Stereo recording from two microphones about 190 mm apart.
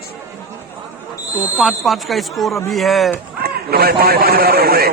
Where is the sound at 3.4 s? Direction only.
55° right (ahead or behind).